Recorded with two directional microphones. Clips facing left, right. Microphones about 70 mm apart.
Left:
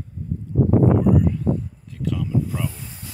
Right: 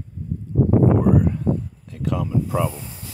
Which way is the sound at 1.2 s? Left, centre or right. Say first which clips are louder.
Even; right.